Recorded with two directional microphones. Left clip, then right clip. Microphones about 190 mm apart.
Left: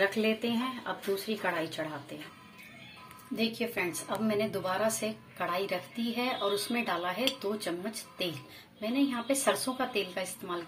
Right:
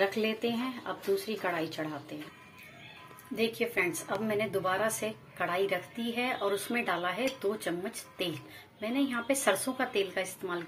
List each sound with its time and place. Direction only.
0.0 s a woman's voice: centre (ahead or behind)
3.3 s a woman's voice: centre (ahead or behind)